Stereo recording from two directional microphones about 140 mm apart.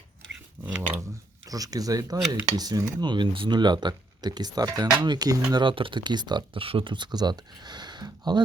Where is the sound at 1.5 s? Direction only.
25° right (ahead or behind).